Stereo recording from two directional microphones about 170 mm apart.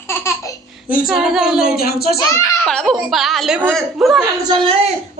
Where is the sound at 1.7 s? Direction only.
65° left (ahead or behind).